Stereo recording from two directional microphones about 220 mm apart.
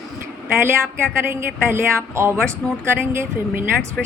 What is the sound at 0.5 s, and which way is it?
A woman's voice, 10° right (ahead or behind).